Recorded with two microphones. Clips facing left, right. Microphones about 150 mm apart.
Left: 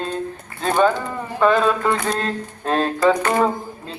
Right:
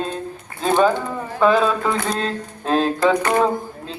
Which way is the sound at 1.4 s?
Centre (ahead or behind).